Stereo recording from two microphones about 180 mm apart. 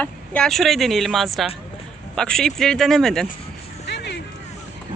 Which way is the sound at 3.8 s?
70° left (ahead or behind).